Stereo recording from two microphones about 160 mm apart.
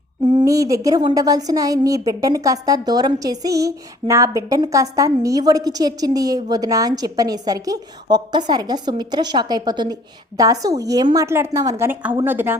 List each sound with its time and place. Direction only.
0.4 s a woman's voice: 20° right (ahead or behind)